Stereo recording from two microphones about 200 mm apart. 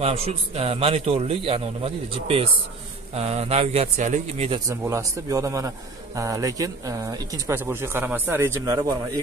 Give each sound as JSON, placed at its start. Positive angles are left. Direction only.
{"t": 0.0, "sound": "a man's voice", "side_deg": -30}
{"t": 4.6, "sound": "speech", "side_deg": -15}